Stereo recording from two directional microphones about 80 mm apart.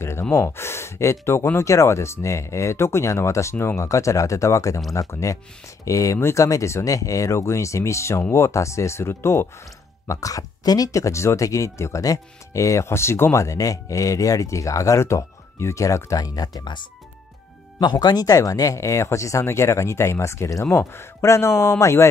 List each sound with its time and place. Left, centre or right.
0.0 s gasp: left
1.2 s speech: left
10.0 s speech: left
18.0 s speech: left